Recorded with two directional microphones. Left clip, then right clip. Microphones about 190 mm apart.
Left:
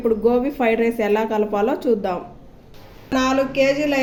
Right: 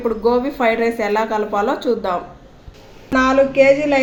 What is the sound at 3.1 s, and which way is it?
Speech, 20° right (ahead or behind).